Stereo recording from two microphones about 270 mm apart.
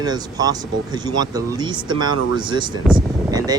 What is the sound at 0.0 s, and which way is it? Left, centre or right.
Speech, centre.